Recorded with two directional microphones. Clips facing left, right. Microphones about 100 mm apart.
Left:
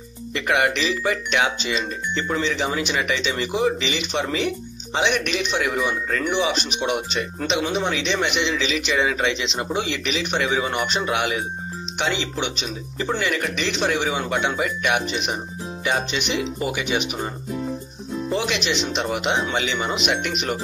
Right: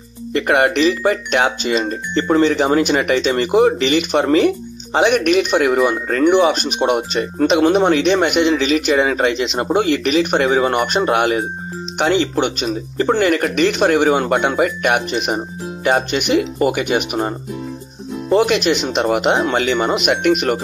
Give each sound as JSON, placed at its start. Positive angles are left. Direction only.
{"t": 0.3, "sound": "speech", "side_deg": -45}